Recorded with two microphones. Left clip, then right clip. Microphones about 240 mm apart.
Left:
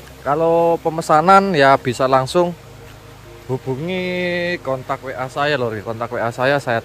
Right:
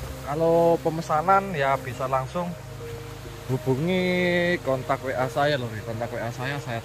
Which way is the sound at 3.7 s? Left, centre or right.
Centre.